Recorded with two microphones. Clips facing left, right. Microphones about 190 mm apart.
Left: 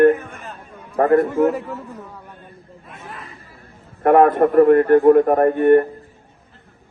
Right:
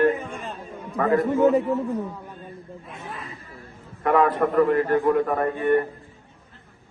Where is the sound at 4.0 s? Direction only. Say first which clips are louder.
Left 7 dB; 55° left (ahead or behind).